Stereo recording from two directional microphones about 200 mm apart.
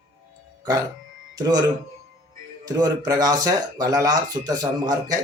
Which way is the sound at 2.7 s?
20° right (ahead or behind).